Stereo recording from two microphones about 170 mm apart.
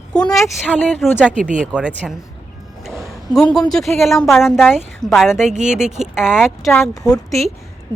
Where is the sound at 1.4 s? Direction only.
50° right (ahead or behind).